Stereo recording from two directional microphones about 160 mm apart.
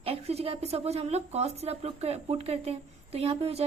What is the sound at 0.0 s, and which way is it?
Speech, 40° right (ahead or behind).